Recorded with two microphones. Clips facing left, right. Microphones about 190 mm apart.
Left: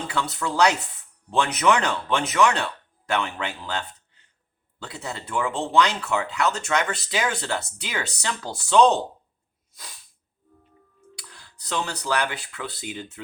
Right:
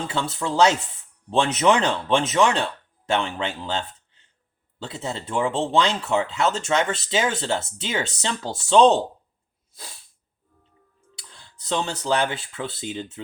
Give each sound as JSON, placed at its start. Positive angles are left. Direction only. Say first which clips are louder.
{"t": 0.1, "sound": "speech", "louder": "right 1 dB", "side_deg": -25}
{"t": 11.1, "sound": "speech", "louder": "left 1 dB", "side_deg": -25}